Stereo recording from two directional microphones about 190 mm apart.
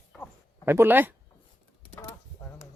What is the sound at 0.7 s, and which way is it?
Speech, 10° right (ahead or behind).